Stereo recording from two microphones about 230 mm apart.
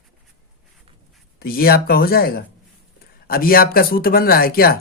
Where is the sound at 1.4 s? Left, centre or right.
Left.